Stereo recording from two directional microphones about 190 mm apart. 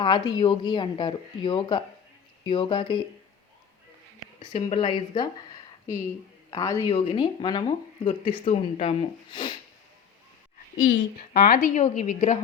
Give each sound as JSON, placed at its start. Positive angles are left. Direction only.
{"t": 0.0, "sound": "speech", "side_deg": 25}
{"t": 4.4, "sound": "speech", "side_deg": 25}
{"t": 6.5, "sound": "a man's voice", "side_deg": 15}
{"t": 6.8, "sound": "speech", "side_deg": 30}
{"t": 11.2, "sound": "a woman's voice", "side_deg": 50}